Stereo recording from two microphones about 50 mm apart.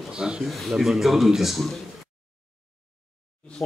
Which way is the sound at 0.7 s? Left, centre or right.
Centre.